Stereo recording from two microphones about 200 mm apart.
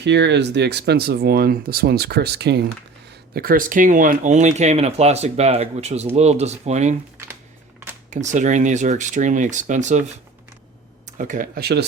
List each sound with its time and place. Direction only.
0.0 s speech: 60° right (ahead or behind); by 6.9 s 35° right (ahead or behind)
8.1 s speech: 35° right (ahead or behind)
11.2 s speech: 40° right (ahead or behind)